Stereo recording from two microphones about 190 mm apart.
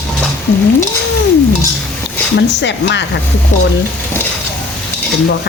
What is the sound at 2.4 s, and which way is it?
Speech, 65° left (ahead or behind).